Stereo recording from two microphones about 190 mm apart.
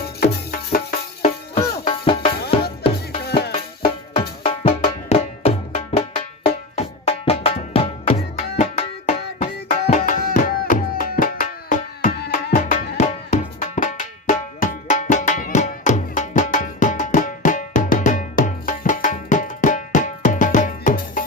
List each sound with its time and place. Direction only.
0.0 s music: 50° left (ahead or behind)
1.5 s music: 30° left (ahead or behind)
3.2 s music: 55° left (ahead or behind)
3.5 s music: 30° left (ahead or behind); by 21.2 s 45° left (ahead or behind)